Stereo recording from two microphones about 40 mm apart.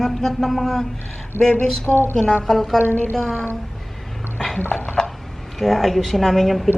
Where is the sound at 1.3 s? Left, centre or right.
Right.